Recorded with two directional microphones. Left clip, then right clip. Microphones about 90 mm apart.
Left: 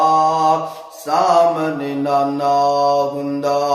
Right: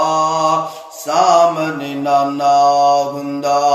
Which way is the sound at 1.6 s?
25° left (ahead or behind).